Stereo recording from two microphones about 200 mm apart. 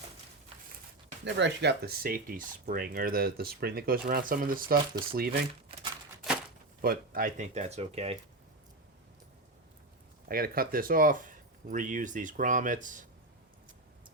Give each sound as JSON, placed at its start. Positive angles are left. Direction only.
{"t": 1.2, "sound": "speech", "side_deg": -60}
{"t": 6.8, "sound": "speech", "side_deg": -45}
{"t": 10.2, "sound": "speech", "side_deg": -45}